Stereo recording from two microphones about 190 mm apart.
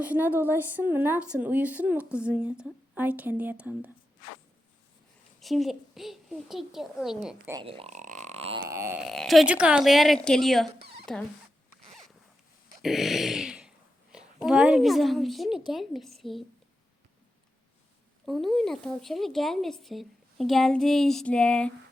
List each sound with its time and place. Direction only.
0.0 s speech: 10° right (ahead or behind)
5.4 s speech: centre (ahead or behind)
7.5 s speech: 30° right (ahead or behind)
8.7 s wail: 15° right (ahead or behind)
9.0 s speech: centre (ahead or behind)
12.8 s speech: centre (ahead or behind)
18.3 s speech: centre (ahead or behind)